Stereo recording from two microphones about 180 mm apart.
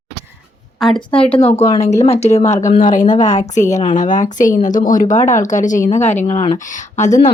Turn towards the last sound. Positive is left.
turn(degrees=40)  # may be behind; listen again after turning